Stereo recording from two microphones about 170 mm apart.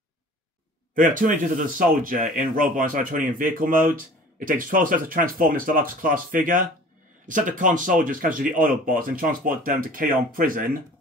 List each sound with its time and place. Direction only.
0.9 s speech: 50° right (ahead or behind)